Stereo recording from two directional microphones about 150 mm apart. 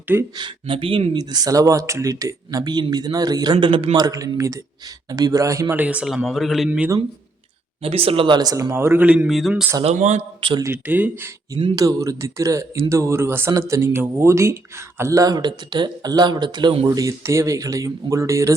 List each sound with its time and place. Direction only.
0.3 s speech: 35° right (ahead or behind)
1.2 s a man's voice: 25° right (ahead or behind); by 6.7 s centre (ahead or behind)
6.7 s a man's voice: 10° right (ahead or behind)
7.8 s speech: 40° right (ahead or behind); by 9.7 s 5° right (ahead or behind)
9.8 s speech: 50° right (ahead or behind)
10.6 s a man's voice: 15° right (ahead or behind)